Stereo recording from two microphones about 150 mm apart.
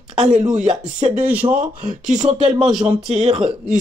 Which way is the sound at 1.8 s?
60° right (ahead or behind).